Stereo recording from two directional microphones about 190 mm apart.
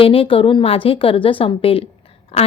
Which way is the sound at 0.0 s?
30° left (ahead or behind).